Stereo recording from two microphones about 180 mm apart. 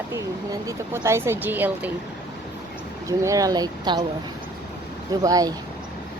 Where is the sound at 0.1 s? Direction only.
20° right (ahead or behind).